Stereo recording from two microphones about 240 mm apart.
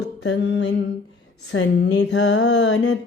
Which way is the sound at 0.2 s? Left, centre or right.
Left.